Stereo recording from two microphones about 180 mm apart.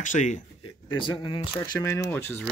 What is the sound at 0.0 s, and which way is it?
Speech, 45° left (ahead or behind).